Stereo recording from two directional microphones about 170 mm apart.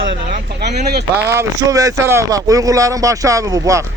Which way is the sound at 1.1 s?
15° right (ahead or behind).